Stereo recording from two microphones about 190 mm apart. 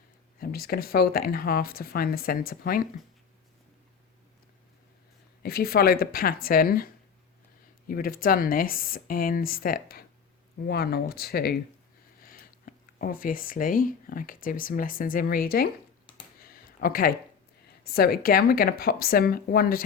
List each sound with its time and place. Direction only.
0.3 s speech: 50° left (ahead or behind)
5.4 s speech: 55° left (ahead or behind)
16.4 s a sound: 50° left (ahead or behind)
17.8 s speech: 55° left (ahead or behind)